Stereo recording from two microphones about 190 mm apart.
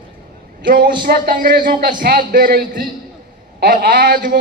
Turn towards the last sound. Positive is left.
turn(degrees=-50)  # may be behind; listen again after turning